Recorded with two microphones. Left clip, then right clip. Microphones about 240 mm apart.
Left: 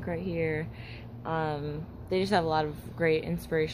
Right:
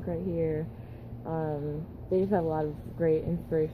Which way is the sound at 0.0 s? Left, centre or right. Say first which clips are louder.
Even; left.